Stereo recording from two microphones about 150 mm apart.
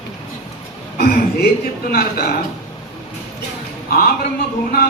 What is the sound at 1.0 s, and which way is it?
Speech, 90° left.